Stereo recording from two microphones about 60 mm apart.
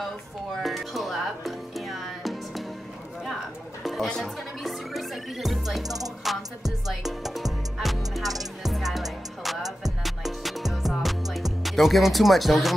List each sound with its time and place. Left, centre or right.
0.6 s music: centre
3.8 s music: centre
8.2 s music: right
8.6 s music: centre
11.6 s speech: centre